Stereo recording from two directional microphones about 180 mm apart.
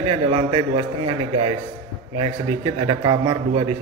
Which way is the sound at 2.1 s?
30° right (ahead or behind).